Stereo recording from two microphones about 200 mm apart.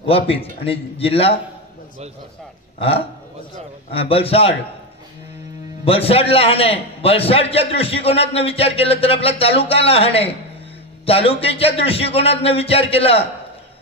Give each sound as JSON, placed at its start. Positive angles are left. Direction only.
{"t": 0.0, "sound": "a man's voice", "side_deg": 30}
{"t": 3.9, "sound": "a man's voice", "side_deg": 30}
{"t": 5.9, "sound": "a man's voice", "side_deg": 30}